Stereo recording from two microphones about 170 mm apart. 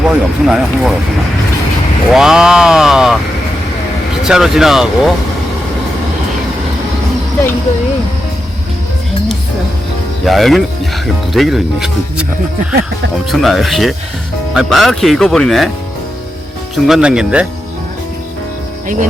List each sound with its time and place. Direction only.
0.0 s speech: 5° right (ahead or behind)
2.1 s speech: 5° right (ahead or behind)
4.2 s speech: centre (ahead or behind)
10.2 s speech: centre (ahead or behind)
13.3 s speech: centre (ahead or behind)
16.7 s speech: centre (ahead or behind)